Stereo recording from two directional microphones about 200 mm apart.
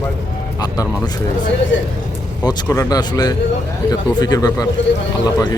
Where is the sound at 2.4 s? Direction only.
15° left (ahead or behind).